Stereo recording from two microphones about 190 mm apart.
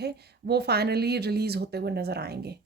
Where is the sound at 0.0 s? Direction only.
60° right (ahead or behind).